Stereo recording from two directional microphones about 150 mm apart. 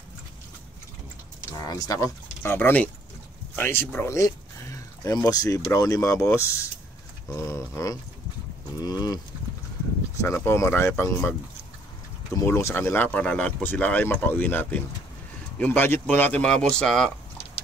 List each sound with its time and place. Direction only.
1.6 s speech: 25° left (ahead or behind)
10.2 s speech: 15° left (ahead or behind)
12.4 s speech: 20° left (ahead or behind); by 17.1 s centre (ahead or behind)